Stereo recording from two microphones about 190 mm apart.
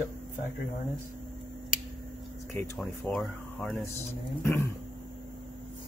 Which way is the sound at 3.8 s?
10° left (ahead or behind).